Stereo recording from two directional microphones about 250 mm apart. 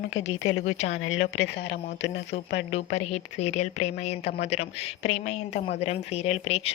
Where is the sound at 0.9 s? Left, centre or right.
Left.